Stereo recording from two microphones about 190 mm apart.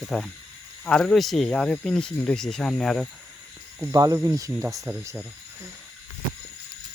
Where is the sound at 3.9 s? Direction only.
20° right (ahead or behind).